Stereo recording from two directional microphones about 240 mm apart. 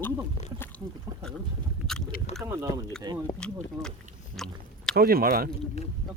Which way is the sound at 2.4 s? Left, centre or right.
Centre.